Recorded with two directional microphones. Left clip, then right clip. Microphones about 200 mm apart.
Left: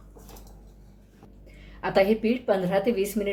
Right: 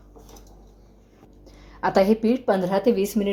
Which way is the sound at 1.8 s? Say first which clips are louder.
Right 3 dB; 30° right (ahead or behind).